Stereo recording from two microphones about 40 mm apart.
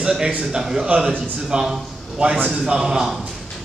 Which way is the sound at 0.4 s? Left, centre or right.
Centre.